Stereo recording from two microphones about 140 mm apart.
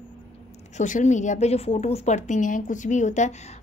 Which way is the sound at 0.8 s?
60° left (ahead or behind).